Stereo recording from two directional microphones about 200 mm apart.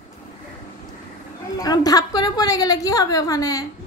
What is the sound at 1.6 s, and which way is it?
A woman's voice, 20° left (ahead or behind).